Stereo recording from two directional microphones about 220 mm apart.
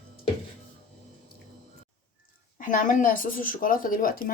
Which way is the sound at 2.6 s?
35° left (ahead or behind).